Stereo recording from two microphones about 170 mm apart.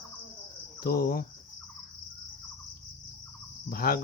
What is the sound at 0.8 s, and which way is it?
Cricket, 60° left (ahead or behind).